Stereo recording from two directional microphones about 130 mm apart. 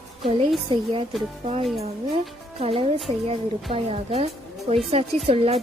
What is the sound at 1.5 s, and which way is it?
A woman's voice, 50° right (ahead or behind).